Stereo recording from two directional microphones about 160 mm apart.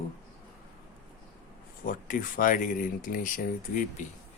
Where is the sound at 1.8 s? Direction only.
60° left (ahead or behind).